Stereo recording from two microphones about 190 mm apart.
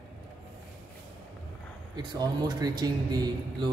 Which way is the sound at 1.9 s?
20° right (ahead or behind).